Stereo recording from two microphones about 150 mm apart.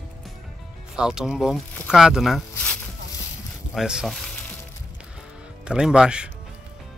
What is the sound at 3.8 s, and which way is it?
Speech, 5° right (ahead or behind).